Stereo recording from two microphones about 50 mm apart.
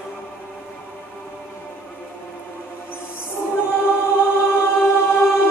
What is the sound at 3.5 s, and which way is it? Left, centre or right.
Choir, left.